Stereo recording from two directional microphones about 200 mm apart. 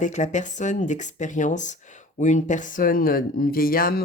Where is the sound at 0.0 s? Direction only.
35° left (ahead or behind).